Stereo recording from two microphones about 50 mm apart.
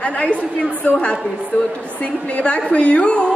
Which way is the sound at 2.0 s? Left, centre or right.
Left.